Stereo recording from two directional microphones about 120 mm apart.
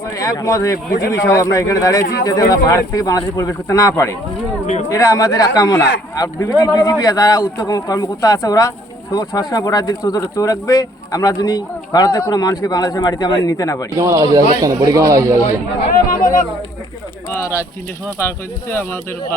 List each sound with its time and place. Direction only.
0.2 s speech: 25° left (ahead or behind)
4.6 s speech: 85° left
4.9 s speech: 30° left (ahead or behind)
13.9 s a man's voice: 25° right (ahead or behind)
16.2 s speech: 90° left
18.2 s speech: 20° left (ahead or behind)